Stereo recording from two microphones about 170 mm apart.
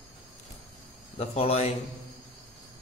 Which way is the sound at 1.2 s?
35° left (ahead or behind).